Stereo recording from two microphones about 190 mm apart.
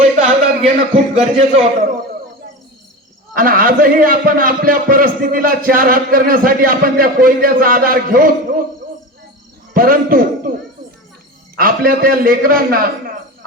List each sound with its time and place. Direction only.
0.0 s speech: 40° right (ahead or behind)
3.3 s a man's voice: 50° right (ahead or behind)
9.7 s a man's voice: 50° right (ahead or behind)
11.5 s a man's voice: 50° right (ahead or behind)